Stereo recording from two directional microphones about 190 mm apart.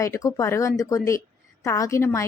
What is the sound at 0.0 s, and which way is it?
Speech, 15° left (ahead or behind).